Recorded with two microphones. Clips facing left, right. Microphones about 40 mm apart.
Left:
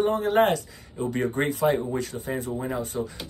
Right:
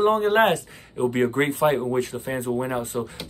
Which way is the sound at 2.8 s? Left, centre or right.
Right.